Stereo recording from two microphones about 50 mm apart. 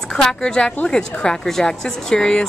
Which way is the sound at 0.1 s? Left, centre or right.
Centre.